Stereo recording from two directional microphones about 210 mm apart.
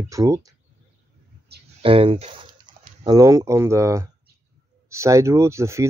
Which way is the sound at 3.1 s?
15° right (ahead or behind).